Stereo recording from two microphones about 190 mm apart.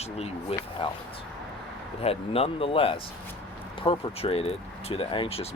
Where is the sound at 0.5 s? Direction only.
30° left (ahead or behind).